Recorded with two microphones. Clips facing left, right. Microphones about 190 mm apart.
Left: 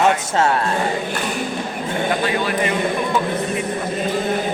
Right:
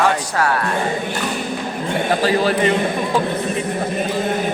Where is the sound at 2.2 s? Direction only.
30° right (ahead or behind).